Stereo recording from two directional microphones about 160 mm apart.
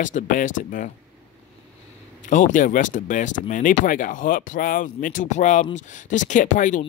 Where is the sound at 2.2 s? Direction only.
55° left (ahead or behind).